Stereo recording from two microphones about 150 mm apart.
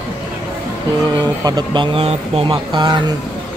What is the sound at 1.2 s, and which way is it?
Speech, 25° right (ahead or behind).